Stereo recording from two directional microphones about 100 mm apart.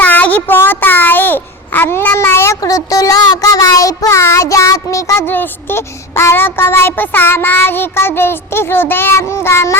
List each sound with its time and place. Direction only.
0.0 s child singing: 15° left (ahead or behind)
2.6 s child singing: 35° left (ahead or behind)